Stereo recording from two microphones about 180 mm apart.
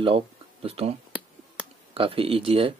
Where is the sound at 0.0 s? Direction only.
30° right (ahead or behind).